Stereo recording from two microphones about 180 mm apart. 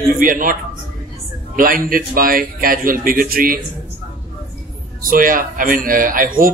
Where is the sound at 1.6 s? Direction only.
50° right (ahead or behind).